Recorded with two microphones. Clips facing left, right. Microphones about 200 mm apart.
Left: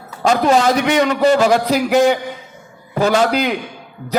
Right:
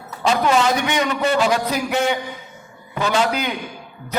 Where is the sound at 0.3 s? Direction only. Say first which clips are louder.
Left 4 dB; 40° left (ahead or behind).